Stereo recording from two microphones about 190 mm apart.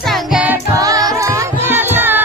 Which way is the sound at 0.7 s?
20° right (ahead or behind).